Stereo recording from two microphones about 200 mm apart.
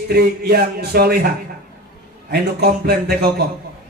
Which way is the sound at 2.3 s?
50° right (ahead or behind).